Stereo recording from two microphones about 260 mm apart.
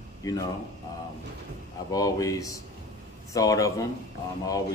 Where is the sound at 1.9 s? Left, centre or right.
Centre.